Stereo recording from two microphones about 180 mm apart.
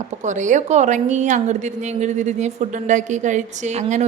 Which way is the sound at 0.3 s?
45° right (ahead or behind).